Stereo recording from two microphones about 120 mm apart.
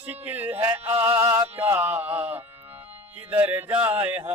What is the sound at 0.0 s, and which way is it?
Music, 15° right (ahead or behind).